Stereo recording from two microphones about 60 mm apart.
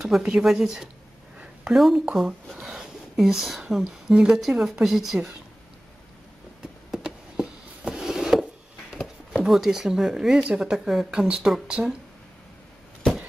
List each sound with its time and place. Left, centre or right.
0.0 s a woman's voice: centre
2.6 s a sound: centre
4.1 s speech: centre
4.4 s speech: centre
6.9 s a sound: centre
8.9 s speech: centre